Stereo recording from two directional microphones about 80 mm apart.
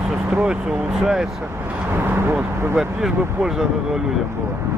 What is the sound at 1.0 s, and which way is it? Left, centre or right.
Speech, centre.